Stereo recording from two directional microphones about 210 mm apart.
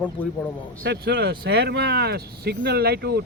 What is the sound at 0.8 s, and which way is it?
Speech, 50° right (ahead or behind).